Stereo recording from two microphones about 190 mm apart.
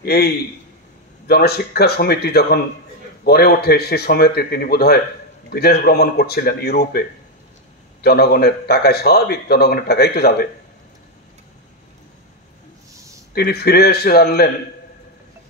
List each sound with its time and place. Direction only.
0.0 s a man's voice: 55° left (ahead or behind)
13.3 s a man's voice: 55° left (ahead or behind)